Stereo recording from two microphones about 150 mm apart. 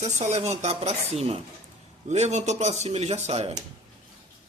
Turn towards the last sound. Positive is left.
turn(degrees=-45)  # may be behind; listen again after turning